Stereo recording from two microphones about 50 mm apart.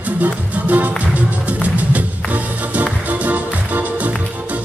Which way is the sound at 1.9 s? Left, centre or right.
Right.